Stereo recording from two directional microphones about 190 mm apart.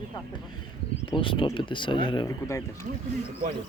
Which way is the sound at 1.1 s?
25° left (ahead or behind).